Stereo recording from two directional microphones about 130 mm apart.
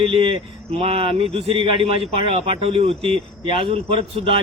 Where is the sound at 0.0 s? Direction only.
45° right (ahead or behind).